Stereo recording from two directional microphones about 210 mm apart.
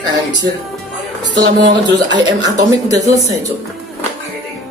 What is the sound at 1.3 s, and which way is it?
Speech, 20° right (ahead or behind).